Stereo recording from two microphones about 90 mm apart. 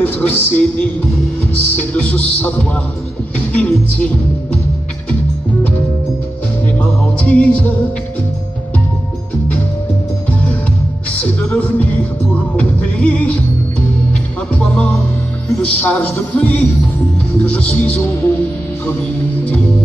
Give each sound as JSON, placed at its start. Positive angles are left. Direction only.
{"t": 0.0, "sound": "a man's voice", "side_deg": 20}
{"t": 1.5, "sound": "music", "side_deg": 15}
{"t": 6.6, "sound": "music", "side_deg": 15}
{"t": 11.1, "sound": "music", "side_deg": 15}
{"t": 14.5, "sound": "music", "side_deg": 15}